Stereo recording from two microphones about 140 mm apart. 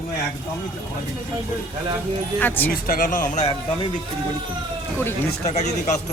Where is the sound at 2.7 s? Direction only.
90° left; by 3.4 s 70° left (ahead or behind).